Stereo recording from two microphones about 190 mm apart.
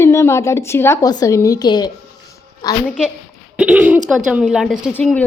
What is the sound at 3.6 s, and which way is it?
A woman's voice, 10° right (ahead or behind).